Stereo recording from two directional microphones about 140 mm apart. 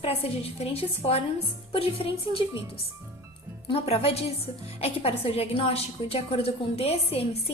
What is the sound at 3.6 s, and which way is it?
A woman's voice, 45° left (ahead or behind).